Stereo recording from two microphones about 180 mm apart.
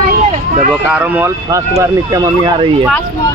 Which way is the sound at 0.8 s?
10° right (ahead or behind).